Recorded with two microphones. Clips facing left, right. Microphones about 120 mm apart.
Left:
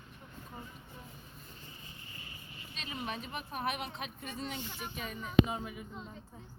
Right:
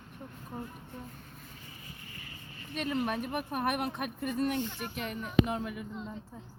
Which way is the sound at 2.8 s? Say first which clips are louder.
Right 9 dB; 60° right (ahead or behind).